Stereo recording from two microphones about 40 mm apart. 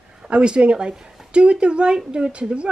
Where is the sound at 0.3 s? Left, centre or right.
Right.